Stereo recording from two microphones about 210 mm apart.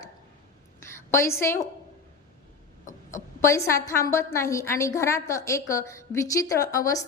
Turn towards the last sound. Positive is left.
turn(degrees=15)  # may be behind; listen again after turning